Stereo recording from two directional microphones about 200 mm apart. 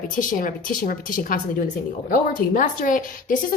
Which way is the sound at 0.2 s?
40° left (ahead or behind).